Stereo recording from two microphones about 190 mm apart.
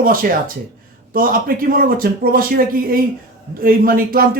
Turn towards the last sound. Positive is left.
turn(degrees=-50)  # may be behind; listen again after turning